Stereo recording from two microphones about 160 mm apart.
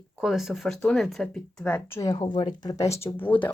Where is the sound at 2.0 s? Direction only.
25° left (ahead or behind).